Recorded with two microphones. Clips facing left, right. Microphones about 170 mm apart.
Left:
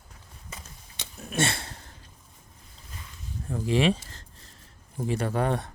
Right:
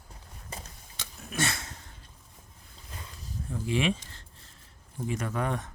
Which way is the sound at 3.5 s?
40° left (ahead or behind).